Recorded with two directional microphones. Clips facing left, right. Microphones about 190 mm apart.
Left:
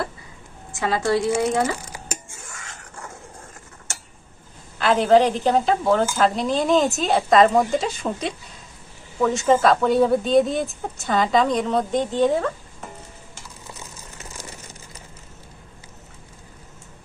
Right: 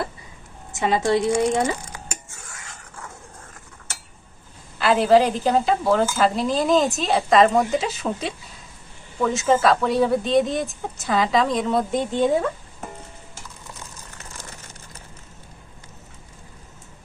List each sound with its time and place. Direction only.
0.7 s speech: 20° right (ahead or behind)
1.3 s speech: 5° left (ahead or behind)
4.8 s a woman's voice: 5° right (ahead or behind)
13.7 s crumpling: 10° left (ahead or behind)